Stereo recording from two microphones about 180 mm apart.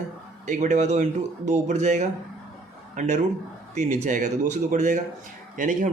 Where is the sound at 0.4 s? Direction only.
40° right (ahead or behind).